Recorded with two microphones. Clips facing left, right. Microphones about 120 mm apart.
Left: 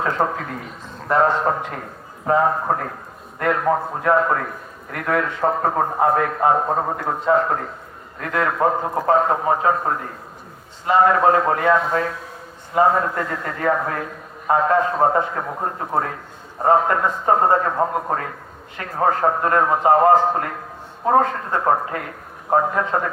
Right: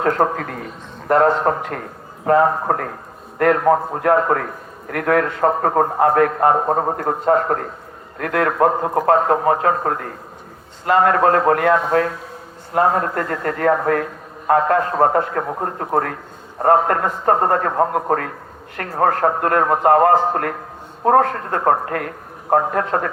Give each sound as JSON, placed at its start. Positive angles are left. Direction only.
{"t": 1.0, "sound": "a man's voice", "side_deg": -60}
{"t": 6.7, "sound": "a man's voice", "side_deg": -35}
{"t": 6.9, "sound": "a man's voice", "side_deg": -55}